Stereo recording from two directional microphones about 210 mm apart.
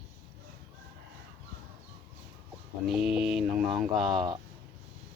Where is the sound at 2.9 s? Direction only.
Centre (ahead or behind).